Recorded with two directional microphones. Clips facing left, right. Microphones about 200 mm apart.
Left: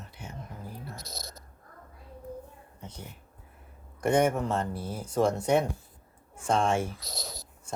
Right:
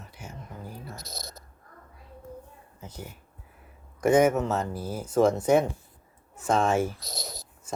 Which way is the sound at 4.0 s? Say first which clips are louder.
Right 4 dB; 5° right (ahead or behind).